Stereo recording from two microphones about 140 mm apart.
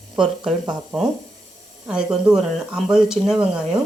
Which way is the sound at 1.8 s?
5° right (ahead or behind).